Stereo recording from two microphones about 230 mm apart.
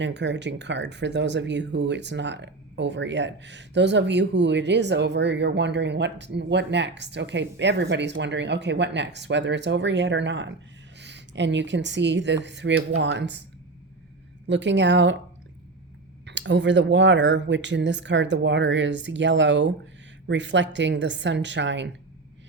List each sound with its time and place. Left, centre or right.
0.0 s speech: right
14.4 s speech: right
16.2 s speech: right